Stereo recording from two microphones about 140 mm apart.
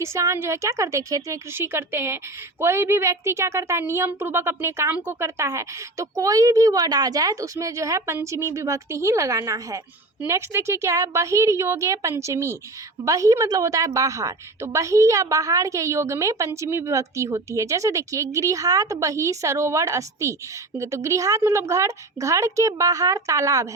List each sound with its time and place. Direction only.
0.0 s a woman's voice: 20° right (ahead or behind)